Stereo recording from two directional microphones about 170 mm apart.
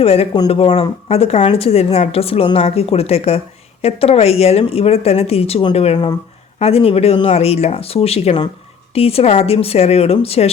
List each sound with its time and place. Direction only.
0.0 s a woman's voice: 35° left (ahead or behind)